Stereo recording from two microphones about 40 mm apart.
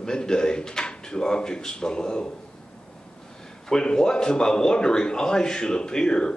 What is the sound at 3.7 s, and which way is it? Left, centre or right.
Speech, centre.